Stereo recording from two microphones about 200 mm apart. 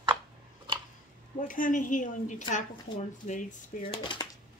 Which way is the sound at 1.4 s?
40° left (ahead or behind).